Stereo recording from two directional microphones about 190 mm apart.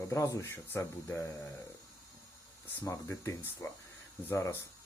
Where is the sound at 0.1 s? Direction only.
15° left (ahead or behind).